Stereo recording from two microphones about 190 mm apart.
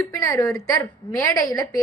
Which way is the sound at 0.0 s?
15° left (ahead or behind).